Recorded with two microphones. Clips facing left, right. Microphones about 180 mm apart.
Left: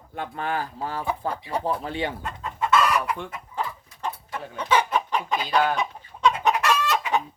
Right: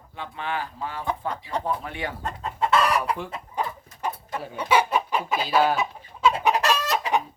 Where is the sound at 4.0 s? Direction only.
10° right (ahead or behind).